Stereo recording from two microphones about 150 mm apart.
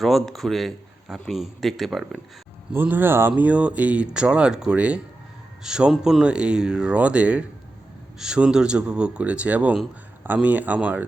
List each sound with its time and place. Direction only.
0.0 s a man's voice: centre (ahead or behind)
2.7 s speech: 15° right (ahead or behind)